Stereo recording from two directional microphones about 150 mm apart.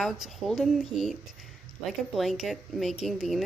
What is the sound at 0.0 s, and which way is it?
Speech, centre (ahead or behind).